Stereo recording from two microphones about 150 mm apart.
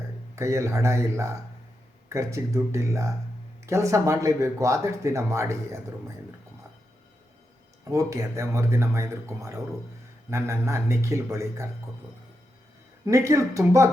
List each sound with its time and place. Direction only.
0.3 s speech: 20° right (ahead or behind)
7.9 s speech: 20° right (ahead or behind)
13.1 s speech: 20° right (ahead or behind)